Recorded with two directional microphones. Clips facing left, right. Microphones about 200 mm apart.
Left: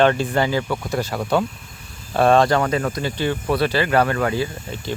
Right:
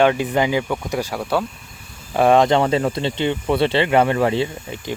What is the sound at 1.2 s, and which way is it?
Speech, 5° right (ahead or behind).